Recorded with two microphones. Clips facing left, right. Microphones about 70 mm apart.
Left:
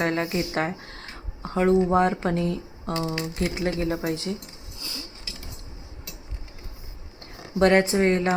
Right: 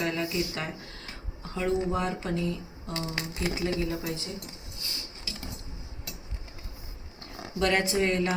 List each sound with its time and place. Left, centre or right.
0.0 s speech: left
7.6 s speech: left